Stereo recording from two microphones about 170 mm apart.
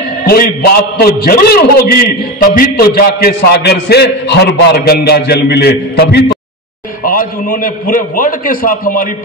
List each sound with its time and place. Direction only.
0.3 s a man's voice: 65° left (ahead or behind)
7.1 s a man's voice: 55° left (ahead or behind)